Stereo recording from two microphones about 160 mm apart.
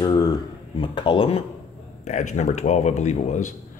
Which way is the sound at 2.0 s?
50° left (ahead or behind).